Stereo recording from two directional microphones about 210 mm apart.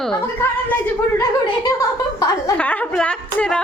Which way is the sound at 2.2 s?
10° left (ahead or behind).